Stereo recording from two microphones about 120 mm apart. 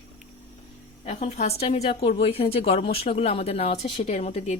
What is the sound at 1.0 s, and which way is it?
Speech, 60° left (ahead or behind).